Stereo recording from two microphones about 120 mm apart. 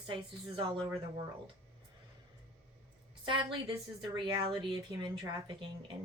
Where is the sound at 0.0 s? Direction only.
45° right (ahead or behind).